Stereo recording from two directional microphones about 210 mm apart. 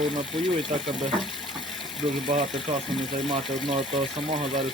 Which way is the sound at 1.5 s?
Centre (ahead or behind).